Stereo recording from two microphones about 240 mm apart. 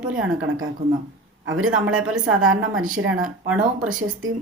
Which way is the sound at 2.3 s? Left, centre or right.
Right.